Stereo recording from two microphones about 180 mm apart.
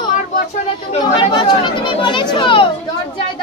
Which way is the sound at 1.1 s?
25° left (ahead or behind).